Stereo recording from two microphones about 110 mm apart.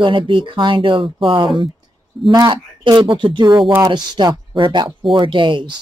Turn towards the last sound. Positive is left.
turn(degrees=-45)  # may be behind; listen again after turning